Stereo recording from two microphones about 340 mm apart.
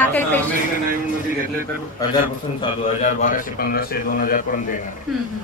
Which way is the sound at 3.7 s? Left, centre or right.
Left.